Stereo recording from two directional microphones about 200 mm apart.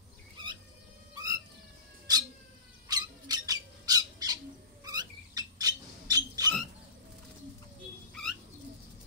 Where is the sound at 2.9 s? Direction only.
20° right (ahead or behind).